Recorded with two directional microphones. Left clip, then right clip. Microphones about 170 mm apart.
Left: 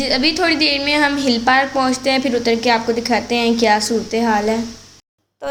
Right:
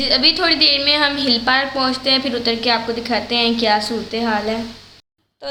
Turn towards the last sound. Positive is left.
turn(degrees=20)  # may be behind; listen again after turning